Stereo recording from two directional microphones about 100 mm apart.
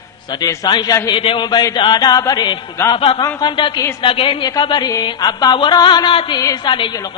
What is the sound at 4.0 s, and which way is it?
Speech, 60° left (ahead or behind).